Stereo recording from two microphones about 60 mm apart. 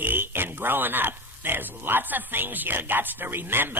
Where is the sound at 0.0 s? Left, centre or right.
Right.